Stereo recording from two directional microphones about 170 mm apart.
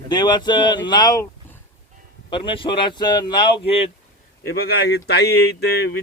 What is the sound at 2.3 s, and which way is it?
Speech, 30° left (ahead or behind).